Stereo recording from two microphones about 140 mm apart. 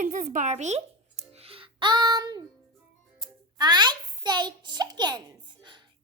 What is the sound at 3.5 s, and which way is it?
A child's voice, 30° right (ahead or behind).